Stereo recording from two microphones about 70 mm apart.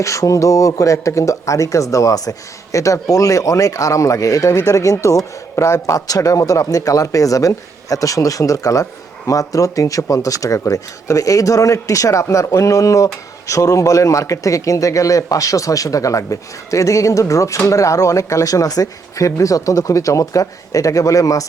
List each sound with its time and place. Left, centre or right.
0.0 s speech: left